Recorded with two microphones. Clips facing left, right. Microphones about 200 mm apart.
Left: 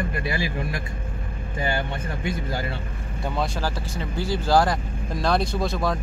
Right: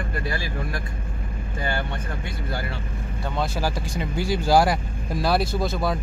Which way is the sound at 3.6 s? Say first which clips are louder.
Right 2 dB; 10° right (ahead or behind).